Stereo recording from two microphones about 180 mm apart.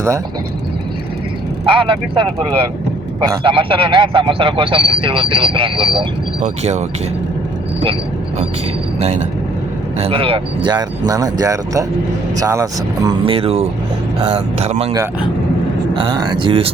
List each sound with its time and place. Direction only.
1.6 s a man's voice: 30° right (ahead or behind)
6.4 s speech: 40° right (ahead or behind)
9.0 s a man's voice: 35° right (ahead or behind); by 13.1 s 15° right (ahead or behind)
13.2 s speech: 30° right (ahead or behind)
16.0 s a man's voice: 25° right (ahead or behind)